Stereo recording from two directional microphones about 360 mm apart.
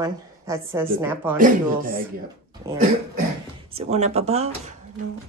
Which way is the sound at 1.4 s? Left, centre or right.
Right.